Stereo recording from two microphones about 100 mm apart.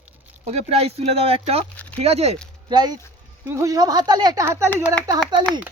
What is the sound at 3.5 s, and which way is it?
Speech, 35° right (ahead or behind).